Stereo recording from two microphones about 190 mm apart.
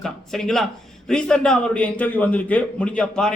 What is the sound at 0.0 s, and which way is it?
A man's voice, centre (ahead or behind).